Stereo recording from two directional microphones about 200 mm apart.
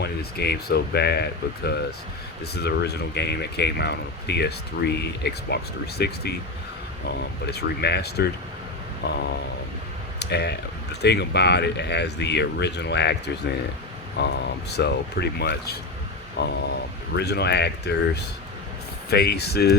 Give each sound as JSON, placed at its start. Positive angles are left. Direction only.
{"t": 0.0, "sound": "speech", "side_deg": 55}
{"t": 7.4, "sound": "speech", "side_deg": 55}